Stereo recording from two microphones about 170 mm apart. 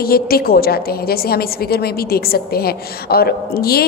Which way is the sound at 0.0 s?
65° left (ahead or behind).